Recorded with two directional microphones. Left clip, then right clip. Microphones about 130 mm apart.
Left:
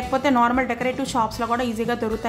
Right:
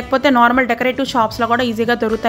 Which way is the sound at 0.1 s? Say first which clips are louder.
Right 7 dB; 25° right (ahead or behind).